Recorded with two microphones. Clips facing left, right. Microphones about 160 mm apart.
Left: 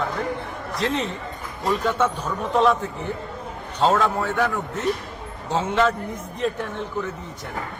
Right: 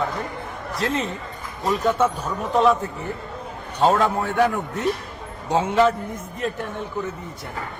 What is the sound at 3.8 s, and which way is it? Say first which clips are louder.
A man's voice: right 1 dB; 15° right (ahead or behind).